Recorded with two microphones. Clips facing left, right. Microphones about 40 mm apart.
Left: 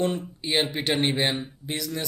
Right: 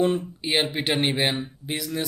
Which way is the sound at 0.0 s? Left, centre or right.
Centre.